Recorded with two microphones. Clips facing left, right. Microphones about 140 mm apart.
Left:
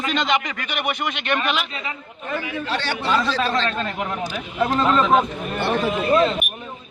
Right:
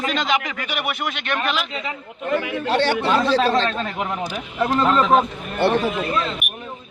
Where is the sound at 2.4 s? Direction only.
60° right (ahead or behind).